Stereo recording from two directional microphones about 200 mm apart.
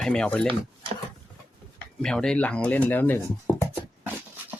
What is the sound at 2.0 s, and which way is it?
Speech, 5° left (ahead or behind).